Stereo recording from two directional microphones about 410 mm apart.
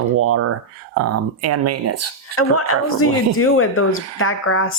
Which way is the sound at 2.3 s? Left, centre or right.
Left.